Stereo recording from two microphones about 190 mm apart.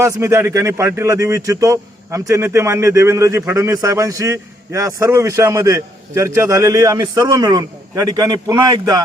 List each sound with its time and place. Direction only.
0.0 s speech: 15° right (ahead or behind)